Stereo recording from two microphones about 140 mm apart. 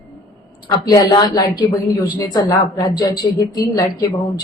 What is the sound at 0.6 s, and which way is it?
A woman's voice, 30° left (ahead or behind).